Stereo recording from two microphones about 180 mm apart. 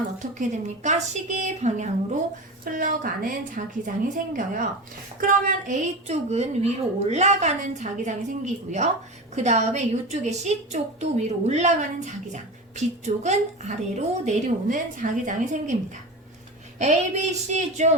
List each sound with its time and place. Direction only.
0.2 s a woman's voice: 45° right (ahead or behind)